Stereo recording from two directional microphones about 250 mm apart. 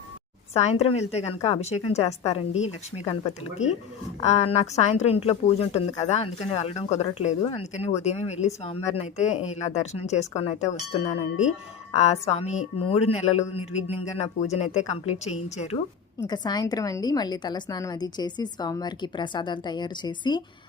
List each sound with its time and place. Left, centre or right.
0.5 s speech: left
3.6 s speech: centre
4.2 s speech: left
11.9 s speech: left
16.2 s a woman's voice: centre